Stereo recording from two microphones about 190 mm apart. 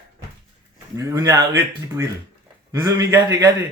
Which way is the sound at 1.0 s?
15° right (ahead or behind).